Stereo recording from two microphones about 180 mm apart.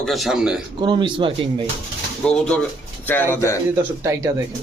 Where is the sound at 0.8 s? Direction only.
25° right (ahead or behind).